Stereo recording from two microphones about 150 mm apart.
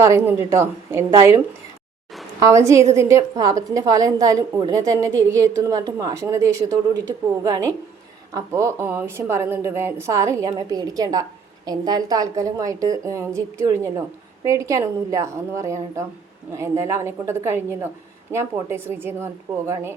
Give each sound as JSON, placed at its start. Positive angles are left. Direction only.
{"t": 0.0, "sound": "a woman's voice", "side_deg": -20}
{"t": 2.4, "sound": "a woman's voice", "side_deg": -20}